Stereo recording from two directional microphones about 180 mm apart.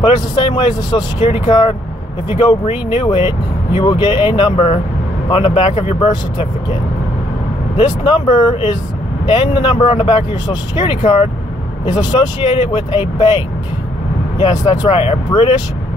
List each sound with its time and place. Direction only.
0.0 s speech: 30° left (ahead or behind)
1.2 s speech: 40° left (ahead or behind)
14.4 s speech: 20° left (ahead or behind)